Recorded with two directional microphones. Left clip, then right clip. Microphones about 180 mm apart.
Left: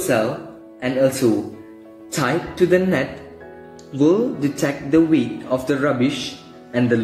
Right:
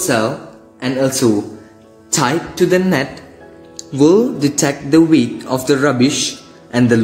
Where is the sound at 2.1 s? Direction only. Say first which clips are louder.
Right 4 dB; 45° right (ahead or behind).